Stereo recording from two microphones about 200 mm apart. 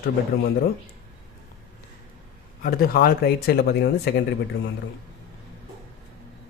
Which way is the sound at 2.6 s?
50° left (ahead or behind).